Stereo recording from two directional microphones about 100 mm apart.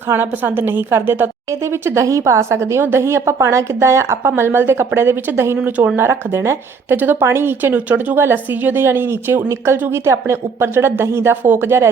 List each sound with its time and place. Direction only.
0.1 s a woman's voice: 20° right (ahead or behind)
6.0 s a woman's voice: 25° right (ahead or behind)